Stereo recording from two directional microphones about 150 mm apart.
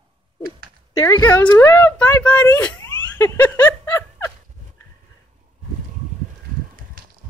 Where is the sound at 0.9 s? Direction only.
20° left (ahead or behind).